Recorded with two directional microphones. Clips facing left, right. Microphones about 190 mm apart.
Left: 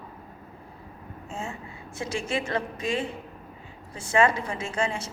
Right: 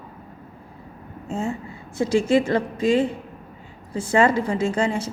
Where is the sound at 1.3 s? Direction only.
35° right (ahead or behind).